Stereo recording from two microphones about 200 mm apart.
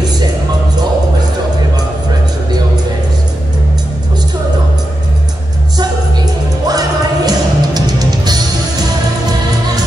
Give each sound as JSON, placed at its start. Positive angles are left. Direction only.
{"t": 6.7, "sound": "music", "side_deg": -20}